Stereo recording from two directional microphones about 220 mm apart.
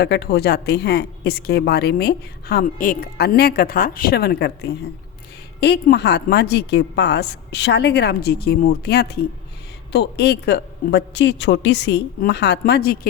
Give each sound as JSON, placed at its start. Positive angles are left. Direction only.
{"t": 0.0, "sound": "speech", "side_deg": 50}